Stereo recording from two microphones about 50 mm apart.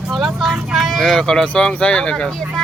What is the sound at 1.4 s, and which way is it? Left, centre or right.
Speech, left.